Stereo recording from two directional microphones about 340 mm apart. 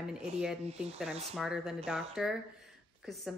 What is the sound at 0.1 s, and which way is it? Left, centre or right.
A woman's voice, centre.